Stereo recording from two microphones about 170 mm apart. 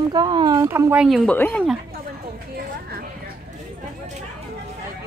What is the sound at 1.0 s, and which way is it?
Speech, centre (ahead or behind).